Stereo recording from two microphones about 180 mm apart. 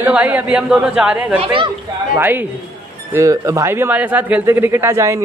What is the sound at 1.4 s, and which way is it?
Speech, 30° right (ahead or behind).